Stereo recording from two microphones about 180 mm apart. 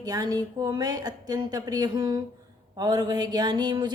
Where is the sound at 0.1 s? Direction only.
20° right (ahead or behind).